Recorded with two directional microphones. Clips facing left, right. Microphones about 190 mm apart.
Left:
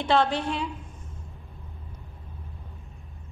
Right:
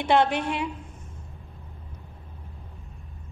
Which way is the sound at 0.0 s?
15° right (ahead or behind).